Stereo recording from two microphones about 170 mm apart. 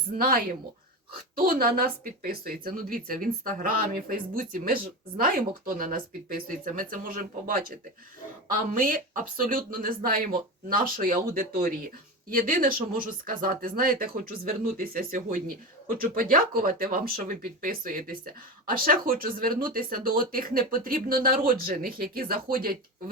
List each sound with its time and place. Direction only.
0.2 s speech: 60° right (ahead or behind)